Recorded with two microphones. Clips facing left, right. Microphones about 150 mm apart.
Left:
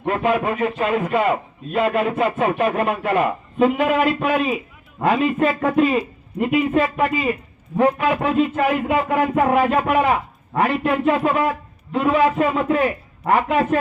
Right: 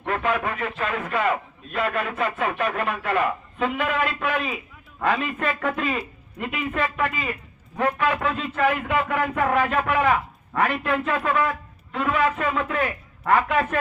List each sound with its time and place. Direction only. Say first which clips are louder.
0.0 s speech: left 5 dB; 25° left (ahead or behind)